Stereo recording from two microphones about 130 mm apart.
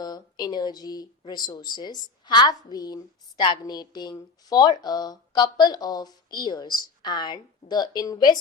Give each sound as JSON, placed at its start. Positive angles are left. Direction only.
{"t": 0.0, "sound": "speech", "side_deg": 30}